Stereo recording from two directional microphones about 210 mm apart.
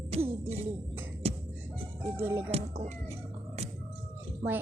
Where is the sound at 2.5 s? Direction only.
30° right (ahead or behind).